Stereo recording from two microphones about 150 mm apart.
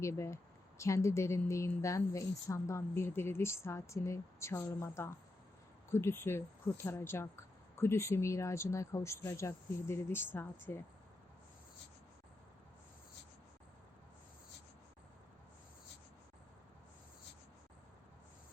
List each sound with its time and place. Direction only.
0.0 s a woman's voice: 20° left (ahead or behind)